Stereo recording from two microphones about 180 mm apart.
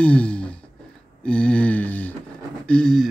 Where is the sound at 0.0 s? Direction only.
5° left (ahead or behind).